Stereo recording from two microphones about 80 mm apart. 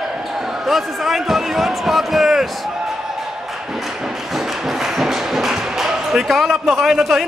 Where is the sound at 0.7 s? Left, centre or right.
Centre.